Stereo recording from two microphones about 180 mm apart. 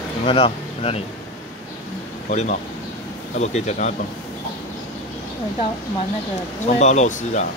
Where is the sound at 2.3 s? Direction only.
40° left (ahead or behind).